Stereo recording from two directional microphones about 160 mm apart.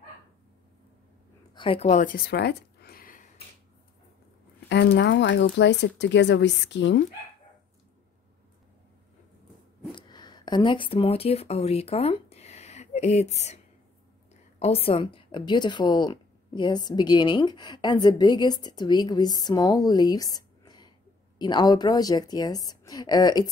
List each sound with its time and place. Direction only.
1.5 s a sound: 35° left (ahead or behind); by 3.3 s 60° left (ahead or behind)
4.6 s speech: 90° left
9.9 s a woman's voice: 25° left (ahead or behind)